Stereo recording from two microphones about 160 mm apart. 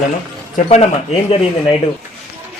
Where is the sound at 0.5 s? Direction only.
45° left (ahead or behind).